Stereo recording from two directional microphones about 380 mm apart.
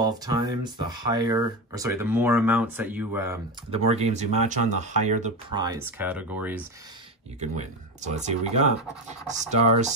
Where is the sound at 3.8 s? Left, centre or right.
Centre.